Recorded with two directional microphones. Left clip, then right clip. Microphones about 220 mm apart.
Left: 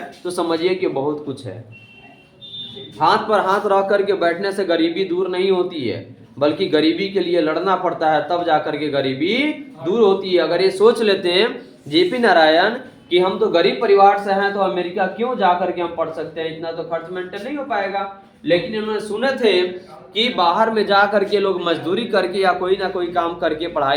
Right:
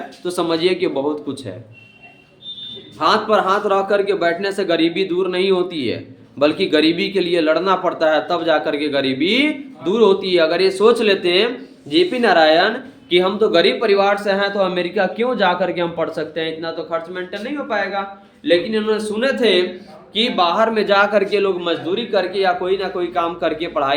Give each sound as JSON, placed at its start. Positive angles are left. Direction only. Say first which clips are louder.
{"t": 0.3, "sound": "speech", "louder": "right 1 dB", "side_deg": -25}
{"t": 3.0, "sound": "a man's voice", "louder": "even", "side_deg": -30}
{"t": 13.1, "sound": "speech", "louder": "right 1 dB", "side_deg": -30}
{"t": 18.4, "sound": "a man's voice", "louder": "right 2 dB", "side_deg": -45}
{"t": 21.6, "sound": "a man's voice", "louder": "left 1 dB", "side_deg": 5}